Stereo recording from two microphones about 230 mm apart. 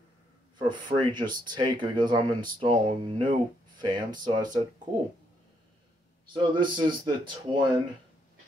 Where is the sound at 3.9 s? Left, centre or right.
Centre.